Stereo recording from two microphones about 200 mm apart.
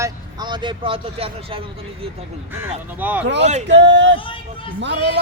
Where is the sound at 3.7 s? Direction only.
60° right (ahead or behind).